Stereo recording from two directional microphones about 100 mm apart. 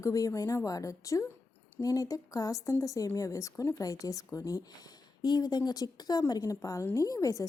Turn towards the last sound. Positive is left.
turn(degrees=35)  # may be behind; listen again after turning